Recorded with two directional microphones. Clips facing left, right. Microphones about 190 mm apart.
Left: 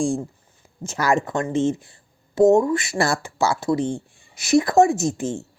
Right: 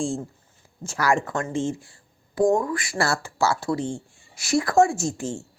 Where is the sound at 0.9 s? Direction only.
20° left (ahead or behind).